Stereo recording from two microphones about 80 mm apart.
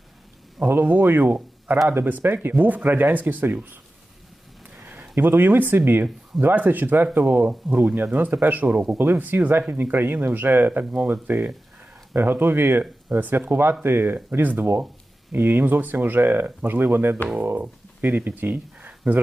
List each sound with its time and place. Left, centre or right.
0.7 s speech: right
4.8 s a sound: right
5.2 s speech: right